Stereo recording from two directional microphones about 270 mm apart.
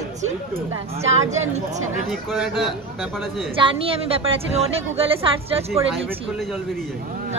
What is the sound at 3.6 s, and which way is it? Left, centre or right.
A woman's voice, right.